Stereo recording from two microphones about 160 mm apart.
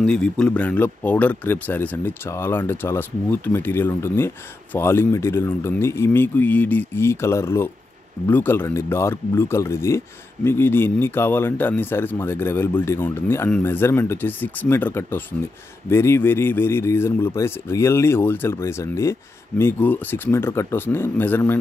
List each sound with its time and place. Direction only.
0.0 s speech: 5° left (ahead or behind)